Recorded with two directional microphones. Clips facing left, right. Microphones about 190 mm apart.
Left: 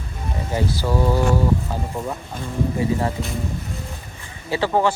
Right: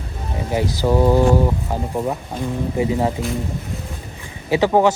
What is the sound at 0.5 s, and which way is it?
Speech, 15° right (ahead or behind).